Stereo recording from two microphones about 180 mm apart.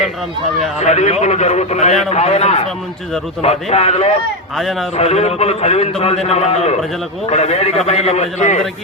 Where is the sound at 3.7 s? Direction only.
35° left (ahead or behind).